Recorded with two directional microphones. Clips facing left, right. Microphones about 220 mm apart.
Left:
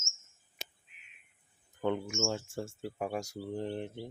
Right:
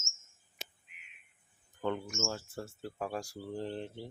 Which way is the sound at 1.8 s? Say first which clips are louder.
Left 3 dB; 15° left (ahead or behind).